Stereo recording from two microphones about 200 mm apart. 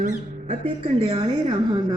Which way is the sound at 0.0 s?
35° right (ahead or behind).